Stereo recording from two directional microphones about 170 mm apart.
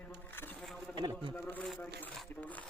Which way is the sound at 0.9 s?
25° right (ahead or behind).